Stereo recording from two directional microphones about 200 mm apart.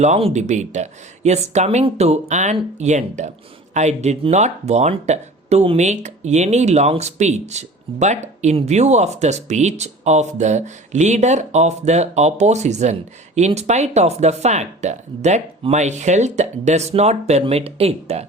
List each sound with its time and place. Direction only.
0.0 s speech: 30° right (ahead or behind)